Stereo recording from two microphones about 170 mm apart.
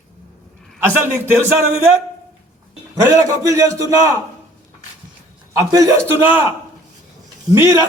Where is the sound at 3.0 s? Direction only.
20° right (ahead or behind).